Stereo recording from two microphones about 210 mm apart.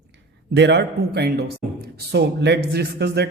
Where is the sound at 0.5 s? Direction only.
55° right (ahead or behind).